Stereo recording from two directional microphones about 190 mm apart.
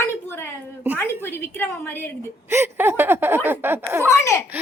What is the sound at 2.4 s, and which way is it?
Speech, 10° right (ahead or behind).